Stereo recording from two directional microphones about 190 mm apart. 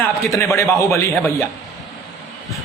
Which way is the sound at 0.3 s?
15° left (ahead or behind).